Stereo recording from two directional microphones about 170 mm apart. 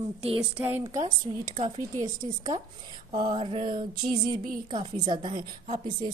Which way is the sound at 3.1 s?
50° right (ahead or behind).